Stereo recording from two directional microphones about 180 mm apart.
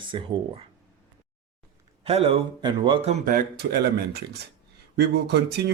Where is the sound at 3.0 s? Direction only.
45° right (ahead or behind); by 5.7 s 65° right (ahead or behind).